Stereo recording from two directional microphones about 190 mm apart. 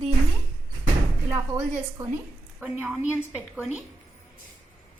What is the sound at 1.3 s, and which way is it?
A woman's voice, 15° right (ahead or behind).